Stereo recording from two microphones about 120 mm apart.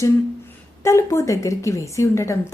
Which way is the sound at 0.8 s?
25° left (ahead or behind).